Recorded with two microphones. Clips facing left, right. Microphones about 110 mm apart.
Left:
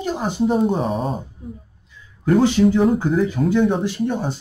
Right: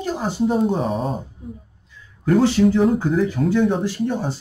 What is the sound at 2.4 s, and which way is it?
Speech, 15° left (ahead or behind).